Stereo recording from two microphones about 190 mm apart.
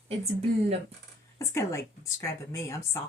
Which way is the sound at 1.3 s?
15° left (ahead or behind).